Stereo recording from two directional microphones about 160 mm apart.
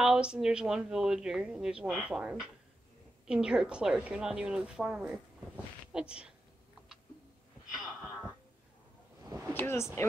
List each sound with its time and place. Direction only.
0.0 s a woman's voice: 5° right (ahead or behind)
7.7 s heart sounds: 5° right (ahead or behind)
9.2 s a sound: 15° right (ahead or behind)
9.5 s speech: 15° left (ahead or behind)